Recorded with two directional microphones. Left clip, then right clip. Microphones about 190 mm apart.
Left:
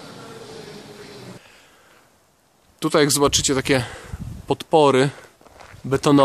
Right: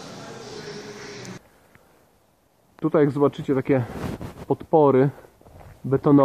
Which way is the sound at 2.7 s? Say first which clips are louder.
Left 2 dB; 20° left (ahead or behind).